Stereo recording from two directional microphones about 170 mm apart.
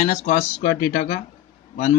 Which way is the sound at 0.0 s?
45° left (ahead or behind).